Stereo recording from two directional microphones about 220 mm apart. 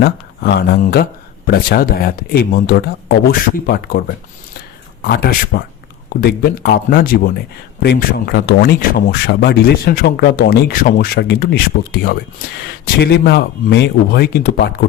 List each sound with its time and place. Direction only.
0.0 s speech: 45° left (ahead or behind)
5.0 s speech: 45° left (ahead or behind)